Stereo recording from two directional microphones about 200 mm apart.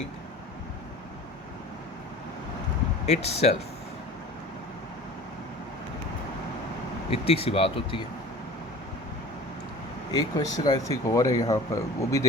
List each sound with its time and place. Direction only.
3.1 s speech: 35° left (ahead or behind)
7.3 s speech: 30° left (ahead or behind)
10.1 s speech: 20° left (ahead or behind)